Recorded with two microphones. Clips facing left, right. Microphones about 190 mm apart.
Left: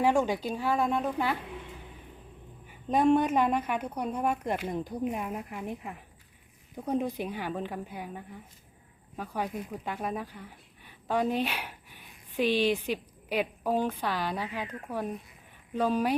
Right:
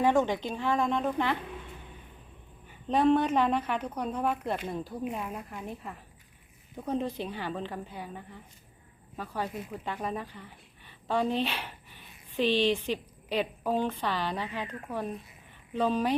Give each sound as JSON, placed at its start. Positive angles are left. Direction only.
{"t": 0.0, "sound": "speech", "side_deg": 10}
{"t": 2.8, "sound": "speech", "side_deg": 10}
{"t": 9.6, "sound": "speech", "side_deg": -5}
{"t": 9.8, "sound": "speech", "side_deg": 10}